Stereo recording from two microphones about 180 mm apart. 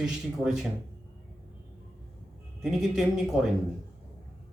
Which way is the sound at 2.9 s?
Centre (ahead or behind).